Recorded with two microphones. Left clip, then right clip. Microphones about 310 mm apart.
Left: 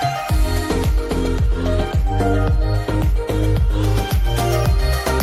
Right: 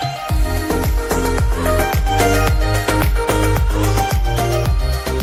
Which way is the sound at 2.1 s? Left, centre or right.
Right.